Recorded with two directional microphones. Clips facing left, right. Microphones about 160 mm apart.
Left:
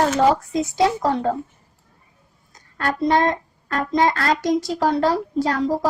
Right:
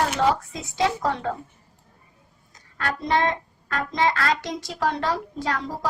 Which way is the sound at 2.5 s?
40° left (ahead or behind).